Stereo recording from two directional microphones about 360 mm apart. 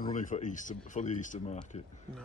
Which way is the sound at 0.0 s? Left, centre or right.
Left.